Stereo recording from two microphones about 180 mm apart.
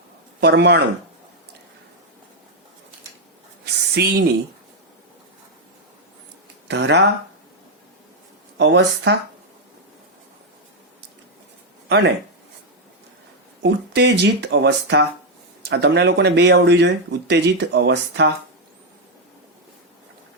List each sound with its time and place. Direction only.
0.3 s speech: 65° right (ahead or behind)
3.9 s speech: 60° right (ahead or behind)
6.7 s speech: 75° right (ahead or behind)
8.5 s speech: 75° right (ahead or behind)
11.9 s speech: 70° right (ahead or behind)
13.6 s speech: 70° right (ahead or behind)